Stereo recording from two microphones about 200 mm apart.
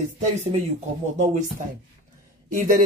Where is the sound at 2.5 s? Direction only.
40° right (ahead or behind).